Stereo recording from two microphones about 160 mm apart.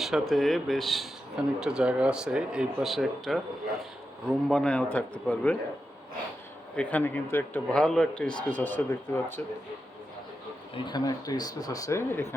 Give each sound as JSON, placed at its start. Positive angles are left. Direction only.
{"t": 0.0, "sound": "a man's voice", "side_deg": 0}
{"t": 6.7, "sound": "a man's voice", "side_deg": 10}
{"t": 10.8, "sound": "speech", "side_deg": 25}